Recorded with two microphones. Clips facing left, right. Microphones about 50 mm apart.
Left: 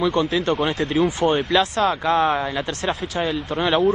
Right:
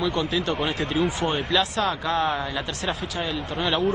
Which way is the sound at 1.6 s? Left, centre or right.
Left.